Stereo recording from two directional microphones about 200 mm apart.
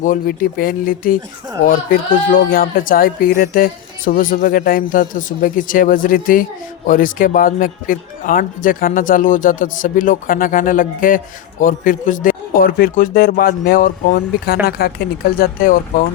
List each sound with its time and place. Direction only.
0.0 s speech: 45° left (ahead or behind)